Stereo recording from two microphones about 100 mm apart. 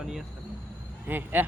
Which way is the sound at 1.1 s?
20° right (ahead or behind).